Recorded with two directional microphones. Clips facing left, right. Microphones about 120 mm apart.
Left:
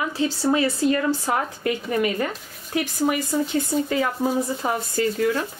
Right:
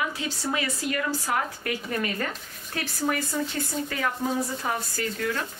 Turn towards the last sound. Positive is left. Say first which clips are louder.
# left 7 dB
turn(degrees=25)  # may be behind; listen again after turning